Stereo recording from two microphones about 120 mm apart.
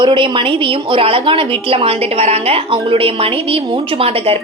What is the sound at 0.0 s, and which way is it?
A woman's voice, 40° right (ahead or behind).